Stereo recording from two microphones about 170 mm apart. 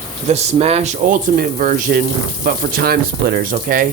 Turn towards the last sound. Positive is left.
turn(degrees=-55)  # may be behind; listen again after turning